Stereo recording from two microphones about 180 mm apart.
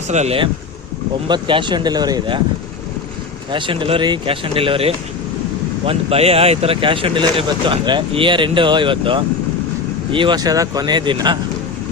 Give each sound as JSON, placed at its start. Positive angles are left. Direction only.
{"t": 0.1, "sound": "speech", "side_deg": -35}
{"t": 1.3, "sound": "speech", "side_deg": -25}
{"t": 3.5, "sound": "speech", "side_deg": -30}